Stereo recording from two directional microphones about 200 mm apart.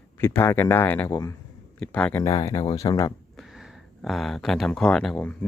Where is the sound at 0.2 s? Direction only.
10° left (ahead or behind).